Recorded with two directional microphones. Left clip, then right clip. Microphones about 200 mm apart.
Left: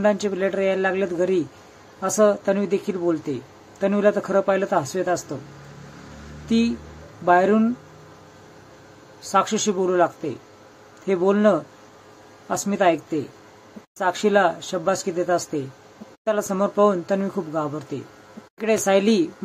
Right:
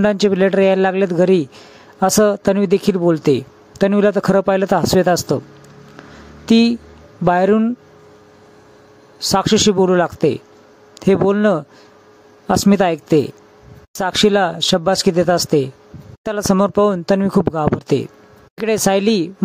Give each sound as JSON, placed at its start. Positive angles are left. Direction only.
{"t": 0.0, "sound": "speech", "side_deg": -55}
{"t": 6.4, "sound": "speech", "side_deg": -55}
{"t": 9.3, "sound": "speech", "side_deg": -55}